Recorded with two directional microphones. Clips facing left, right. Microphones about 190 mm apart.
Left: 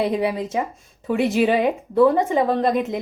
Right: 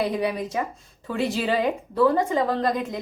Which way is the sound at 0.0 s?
25° left (ahead or behind).